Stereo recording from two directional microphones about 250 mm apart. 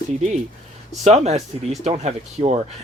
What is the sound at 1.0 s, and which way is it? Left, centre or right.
Speech, right.